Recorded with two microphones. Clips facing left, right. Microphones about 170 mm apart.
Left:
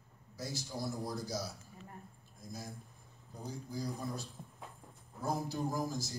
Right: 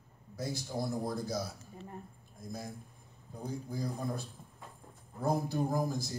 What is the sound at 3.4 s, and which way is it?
Speech, 55° right (ahead or behind).